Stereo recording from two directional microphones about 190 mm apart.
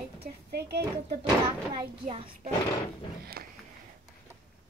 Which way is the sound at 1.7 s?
30° right (ahead or behind).